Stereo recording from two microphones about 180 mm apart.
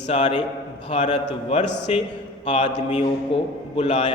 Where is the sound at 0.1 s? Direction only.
40° left (ahead or behind).